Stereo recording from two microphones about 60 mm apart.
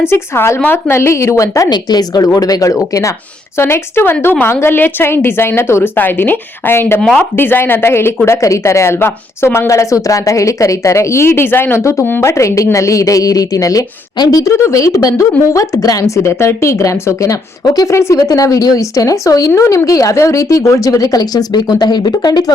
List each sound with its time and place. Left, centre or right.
0.0 s speech: left
2.1 s speech: left
3.6 s a woman's voice: left
6.0 s a woman's voice: left
8.4 s speech: left
11.8 s a woman's voice: left
14.5 s speech: left
19.5 s speech: left